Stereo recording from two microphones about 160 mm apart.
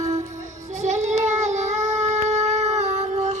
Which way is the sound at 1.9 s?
45° right (ahead or behind).